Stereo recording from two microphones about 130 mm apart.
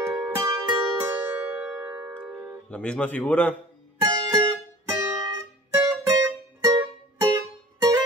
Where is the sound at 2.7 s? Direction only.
10° left (ahead or behind).